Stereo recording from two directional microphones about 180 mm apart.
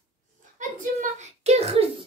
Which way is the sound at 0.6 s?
40° right (ahead or behind).